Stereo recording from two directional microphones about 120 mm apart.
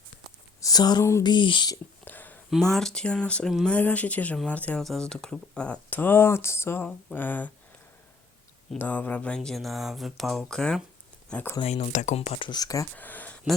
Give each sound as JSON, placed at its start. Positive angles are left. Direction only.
{"t": 0.6, "sound": "speech", "side_deg": 35}
{"t": 2.0, "sound": "a sound", "side_deg": 15}
{"t": 2.5, "sound": "speech", "side_deg": 5}
{"t": 8.8, "sound": "speech", "side_deg": 15}
{"t": 11.6, "sound": "speech", "side_deg": 60}
{"t": 12.5, "sound": "speech", "side_deg": 30}
{"t": 13.0, "sound": "a sound", "side_deg": 15}